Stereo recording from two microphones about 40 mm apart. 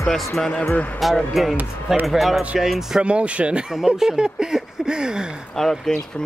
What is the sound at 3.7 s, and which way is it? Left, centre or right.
Speech, centre.